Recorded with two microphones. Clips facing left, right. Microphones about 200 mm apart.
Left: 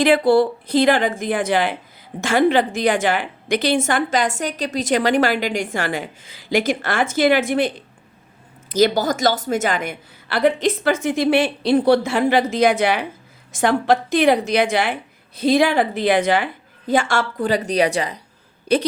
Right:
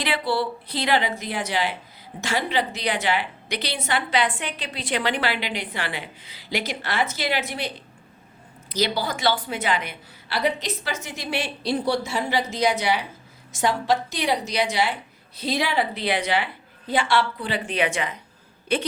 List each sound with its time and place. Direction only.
0.0 s a woman's voice: 45° left (ahead or behind)
8.7 s a woman's voice: 50° left (ahead or behind)